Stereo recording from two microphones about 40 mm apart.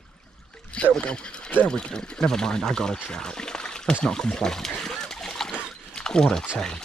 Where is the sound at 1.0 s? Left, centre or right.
Left.